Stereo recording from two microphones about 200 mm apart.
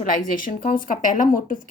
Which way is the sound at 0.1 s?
45° left (ahead or behind).